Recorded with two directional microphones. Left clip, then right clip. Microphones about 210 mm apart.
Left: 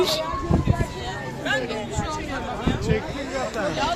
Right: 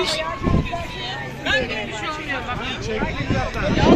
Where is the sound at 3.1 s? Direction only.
25° left (ahead or behind).